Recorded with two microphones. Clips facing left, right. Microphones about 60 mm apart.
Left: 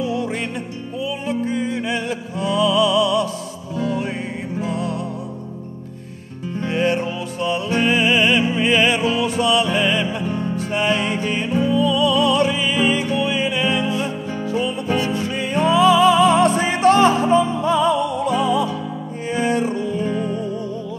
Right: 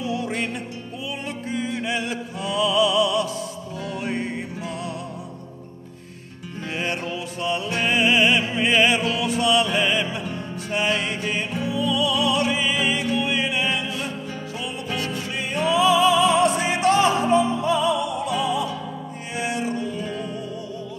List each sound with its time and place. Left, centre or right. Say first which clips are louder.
0.0 s music: left 3 dB; centre
6.5 s music: left 8 dB; centre
11.7 s music: left 4 dB; left
12.4 s music: left 4 dB; centre
13.8 s music: left 6 dB; left
15.5 s music: left 4 dB; left